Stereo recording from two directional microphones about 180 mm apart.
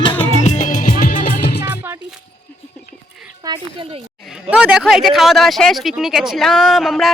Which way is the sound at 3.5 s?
20° right (ahead or behind).